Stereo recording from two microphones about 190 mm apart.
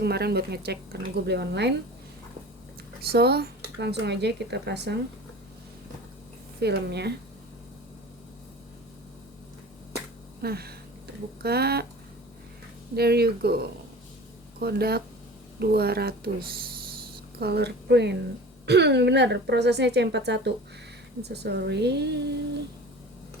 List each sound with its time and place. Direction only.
0.0 s speech: 60° right (ahead or behind)
3.1 s speech: 55° right (ahead or behind)
6.6 s speech: 60° right (ahead or behind)
10.4 s speech: 55° right (ahead or behind)
13.0 s speech: 55° right (ahead or behind)
17.4 s speech: 60° right (ahead or behind)